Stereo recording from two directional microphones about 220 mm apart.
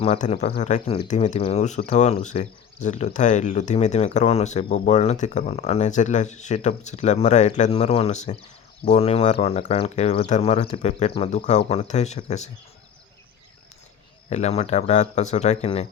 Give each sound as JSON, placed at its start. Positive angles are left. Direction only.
{"t": 0.0, "sound": "speech", "side_deg": 25}
{"t": 14.3, "sound": "speech", "side_deg": 30}